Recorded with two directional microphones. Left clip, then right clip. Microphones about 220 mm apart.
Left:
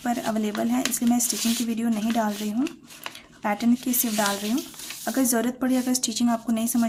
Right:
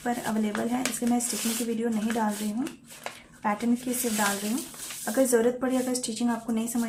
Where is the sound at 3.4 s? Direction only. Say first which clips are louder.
Left 2 dB; 50° left (ahead or behind).